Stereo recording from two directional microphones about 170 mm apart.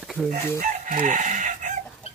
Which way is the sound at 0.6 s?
50° right (ahead or behind).